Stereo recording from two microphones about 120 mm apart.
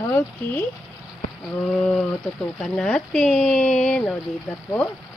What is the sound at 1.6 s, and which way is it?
Speech, 5° left (ahead or behind).